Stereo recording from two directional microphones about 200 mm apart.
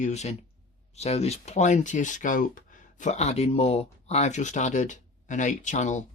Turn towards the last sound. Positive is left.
turn(degrees=35)  # may be behind; listen again after turning